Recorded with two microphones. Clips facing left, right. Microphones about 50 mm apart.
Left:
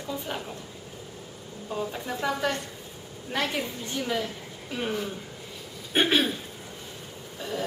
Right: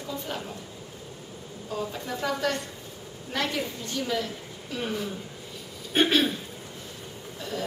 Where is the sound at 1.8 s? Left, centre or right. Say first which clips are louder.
Left 1 dB; centre.